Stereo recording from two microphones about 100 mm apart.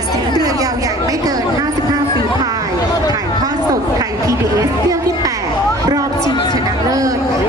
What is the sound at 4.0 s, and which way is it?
Chatter, 35° right (ahead or behind).